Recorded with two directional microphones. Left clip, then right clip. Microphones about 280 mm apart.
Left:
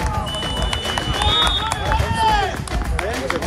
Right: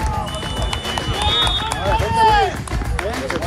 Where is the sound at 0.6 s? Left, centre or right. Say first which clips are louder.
Right 2 dB; centre.